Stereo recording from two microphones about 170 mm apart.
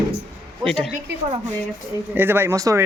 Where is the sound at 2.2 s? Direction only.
15° right (ahead or behind).